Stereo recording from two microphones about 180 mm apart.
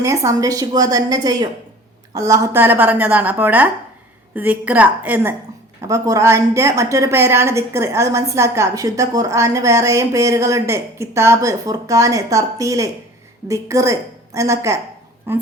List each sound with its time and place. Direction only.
0.0 s a woman's voice: 15° right (ahead or behind)